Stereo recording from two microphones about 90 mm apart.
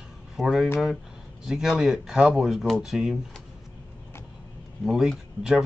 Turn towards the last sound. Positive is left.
turn(degrees=-5)  # may be behind; listen again after turning